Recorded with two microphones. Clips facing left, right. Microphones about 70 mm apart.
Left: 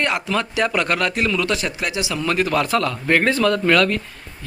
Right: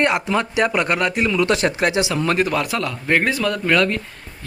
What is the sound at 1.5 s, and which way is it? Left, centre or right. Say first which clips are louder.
A man's voice: right 5 dB; right.